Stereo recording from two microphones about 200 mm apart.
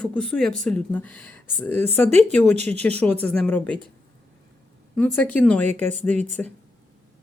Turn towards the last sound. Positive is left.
turn(degrees=10)  # may be behind; listen again after turning